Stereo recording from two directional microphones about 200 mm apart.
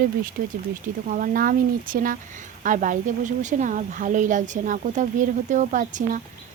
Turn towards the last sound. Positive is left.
turn(degrees=-40)  # may be behind; listen again after turning